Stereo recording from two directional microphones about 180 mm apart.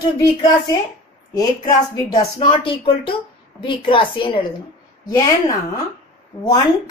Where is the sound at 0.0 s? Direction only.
25° left (ahead or behind).